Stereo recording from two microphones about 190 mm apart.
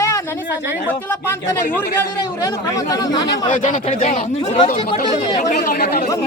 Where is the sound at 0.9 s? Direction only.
10° left (ahead or behind).